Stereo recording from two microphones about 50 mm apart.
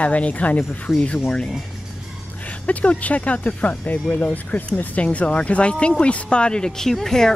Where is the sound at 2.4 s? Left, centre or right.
Left.